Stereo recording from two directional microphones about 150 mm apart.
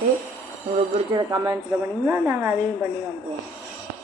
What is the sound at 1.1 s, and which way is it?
Speech, 25° right (ahead or behind).